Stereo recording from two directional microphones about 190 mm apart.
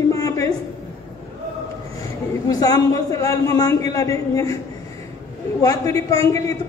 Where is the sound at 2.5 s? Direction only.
20° left (ahead or behind).